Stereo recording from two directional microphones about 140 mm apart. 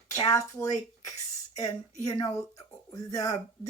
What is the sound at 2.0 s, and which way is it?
Speech, 25° left (ahead or behind).